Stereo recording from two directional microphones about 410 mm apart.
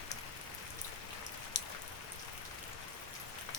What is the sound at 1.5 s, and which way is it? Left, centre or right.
Raindrop, left.